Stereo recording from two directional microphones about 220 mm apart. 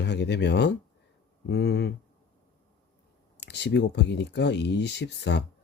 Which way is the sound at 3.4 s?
50° left (ahead or behind).